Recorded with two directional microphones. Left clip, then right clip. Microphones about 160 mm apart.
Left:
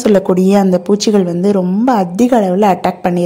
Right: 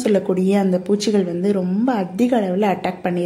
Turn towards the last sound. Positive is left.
turn(degrees=35)  # may be behind; listen again after turning